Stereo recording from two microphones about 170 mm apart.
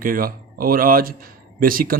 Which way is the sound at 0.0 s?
55° right (ahead or behind).